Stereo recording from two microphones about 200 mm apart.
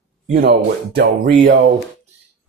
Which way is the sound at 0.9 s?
55° right (ahead or behind).